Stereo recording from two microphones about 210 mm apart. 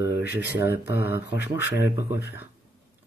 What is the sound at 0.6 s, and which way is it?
Speech, 55° left (ahead or behind).